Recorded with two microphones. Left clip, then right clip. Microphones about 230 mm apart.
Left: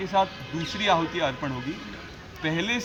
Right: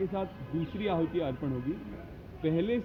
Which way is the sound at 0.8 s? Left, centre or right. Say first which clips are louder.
Left 8 dB; left.